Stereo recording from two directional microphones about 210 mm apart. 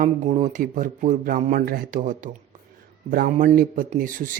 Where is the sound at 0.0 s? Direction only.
35° right (ahead or behind).